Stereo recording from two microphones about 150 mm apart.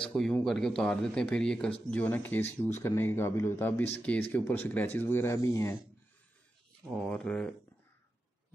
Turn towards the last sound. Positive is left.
turn(degrees=5)  # may be behind; listen again after turning